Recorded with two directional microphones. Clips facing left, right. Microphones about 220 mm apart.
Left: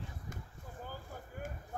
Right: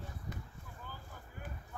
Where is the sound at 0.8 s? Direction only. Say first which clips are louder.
Left 6 dB; 45° left (ahead or behind).